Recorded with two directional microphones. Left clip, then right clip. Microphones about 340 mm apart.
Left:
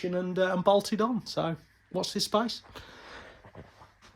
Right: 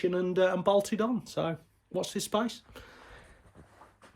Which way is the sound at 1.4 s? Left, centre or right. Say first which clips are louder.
Left 1 dB; centre.